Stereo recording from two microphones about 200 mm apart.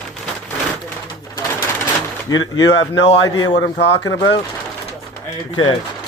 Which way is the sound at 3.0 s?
60° left (ahead or behind).